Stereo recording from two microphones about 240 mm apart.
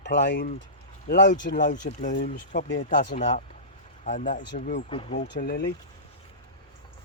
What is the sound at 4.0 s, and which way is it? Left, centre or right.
Speech, left.